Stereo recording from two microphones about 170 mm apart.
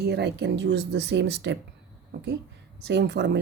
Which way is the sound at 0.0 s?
75° right (ahead or behind).